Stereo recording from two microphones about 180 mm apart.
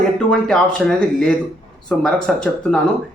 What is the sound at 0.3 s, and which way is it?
Speech, 5° left (ahead or behind).